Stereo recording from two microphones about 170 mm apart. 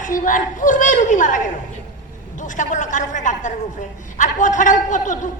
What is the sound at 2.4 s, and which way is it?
A man's voice, 50° left (ahead or behind).